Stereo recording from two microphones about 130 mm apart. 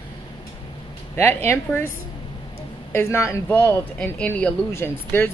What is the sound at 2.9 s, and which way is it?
Speech, 20° left (ahead or behind).